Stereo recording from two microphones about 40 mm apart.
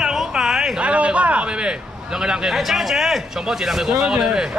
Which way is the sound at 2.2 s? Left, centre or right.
Centre.